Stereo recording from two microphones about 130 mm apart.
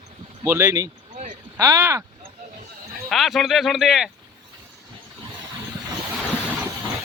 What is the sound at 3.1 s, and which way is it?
Speech, centre (ahead or behind).